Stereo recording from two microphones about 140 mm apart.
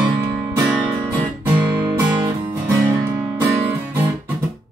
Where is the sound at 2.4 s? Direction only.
15° right (ahead or behind).